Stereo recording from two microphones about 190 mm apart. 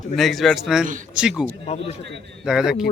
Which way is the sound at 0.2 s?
Centre (ahead or behind).